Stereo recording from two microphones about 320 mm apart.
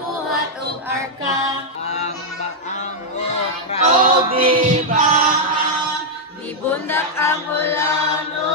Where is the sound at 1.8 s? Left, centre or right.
Left.